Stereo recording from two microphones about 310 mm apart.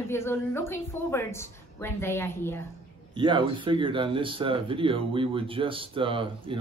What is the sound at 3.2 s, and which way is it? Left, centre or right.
Speech, centre.